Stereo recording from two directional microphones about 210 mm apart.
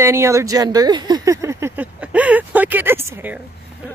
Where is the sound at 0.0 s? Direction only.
10° right (ahead or behind).